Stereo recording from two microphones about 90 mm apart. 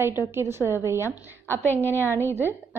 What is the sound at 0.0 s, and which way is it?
A woman's voice, 20° right (ahead or behind).